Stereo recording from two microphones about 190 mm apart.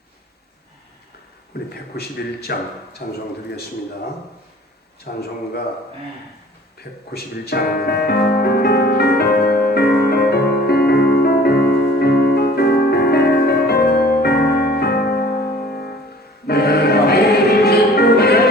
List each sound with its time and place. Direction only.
1.5 s a man's voice: 55° left (ahead or behind)
5.1 s speech: 50° left (ahead or behind)
7.1 s music: 55° left (ahead or behind)